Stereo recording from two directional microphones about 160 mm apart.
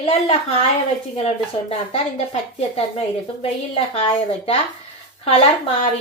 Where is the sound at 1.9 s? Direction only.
40° left (ahead or behind).